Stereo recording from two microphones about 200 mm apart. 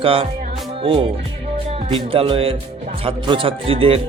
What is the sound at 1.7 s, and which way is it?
Speech, 30° right (ahead or behind).